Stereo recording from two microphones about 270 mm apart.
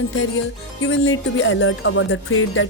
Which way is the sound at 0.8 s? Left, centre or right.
Left.